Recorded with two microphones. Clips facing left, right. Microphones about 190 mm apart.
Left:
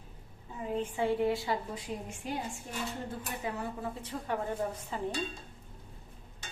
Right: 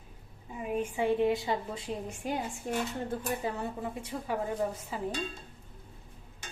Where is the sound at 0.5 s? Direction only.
15° right (ahead or behind).